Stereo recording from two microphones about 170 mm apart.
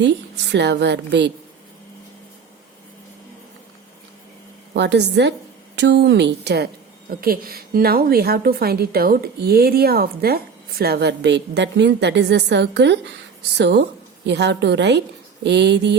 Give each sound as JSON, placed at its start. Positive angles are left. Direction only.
{"t": 0.0, "sound": "a woman's voice", "side_deg": -90}
{"t": 4.7, "sound": "a woman's voice", "side_deg": -90}
{"t": 7.1, "sound": "a woman's voice", "side_deg": -60}